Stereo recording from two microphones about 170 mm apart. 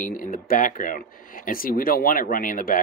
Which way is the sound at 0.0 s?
50° left (ahead or behind).